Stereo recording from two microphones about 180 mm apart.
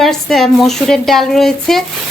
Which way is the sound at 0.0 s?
Centre (ahead or behind).